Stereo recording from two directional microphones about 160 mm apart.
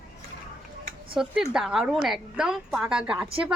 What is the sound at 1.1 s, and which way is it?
A woman's voice, 5° right (ahead or behind).